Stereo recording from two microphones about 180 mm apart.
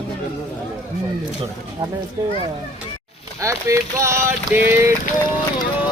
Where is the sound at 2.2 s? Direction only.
20° right (ahead or behind).